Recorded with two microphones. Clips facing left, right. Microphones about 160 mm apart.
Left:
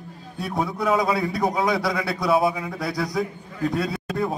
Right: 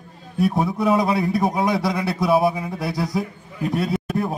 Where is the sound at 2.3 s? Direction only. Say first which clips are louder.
Right 2 dB; centre (ahead or behind).